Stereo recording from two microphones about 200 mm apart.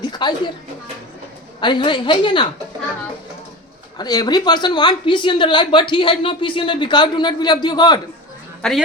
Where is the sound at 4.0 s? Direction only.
20° left (ahead or behind).